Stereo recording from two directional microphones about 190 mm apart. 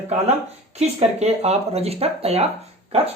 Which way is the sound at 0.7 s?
35° right (ahead or behind).